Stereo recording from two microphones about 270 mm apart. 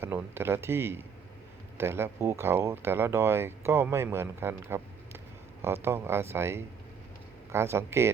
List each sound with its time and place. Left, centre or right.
0.0 s speech: centre